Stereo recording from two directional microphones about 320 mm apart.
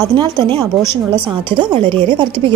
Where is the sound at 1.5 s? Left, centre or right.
Centre.